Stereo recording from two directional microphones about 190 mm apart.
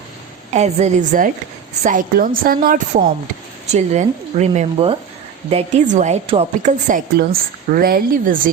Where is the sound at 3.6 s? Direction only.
35° right (ahead or behind).